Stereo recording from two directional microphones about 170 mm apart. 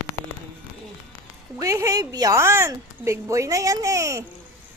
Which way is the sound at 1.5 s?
20° right (ahead or behind).